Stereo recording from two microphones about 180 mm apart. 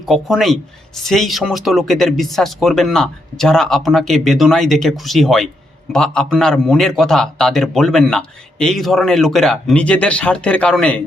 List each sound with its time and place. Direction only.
0.0 s speech: centre (ahead or behind)